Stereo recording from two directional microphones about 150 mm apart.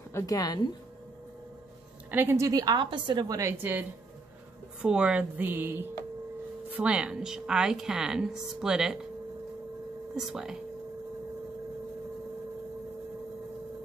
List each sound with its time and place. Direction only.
0.1 s speech: 20° left (ahead or behind)
2.0 s a woman's voice: 15° right (ahead or behind)
4.8 s a woman's voice: 5° right (ahead or behind)
10.1 s a woman's voice: 5° right (ahead or behind)